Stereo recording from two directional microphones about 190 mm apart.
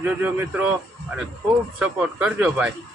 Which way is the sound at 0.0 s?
10° right (ahead or behind).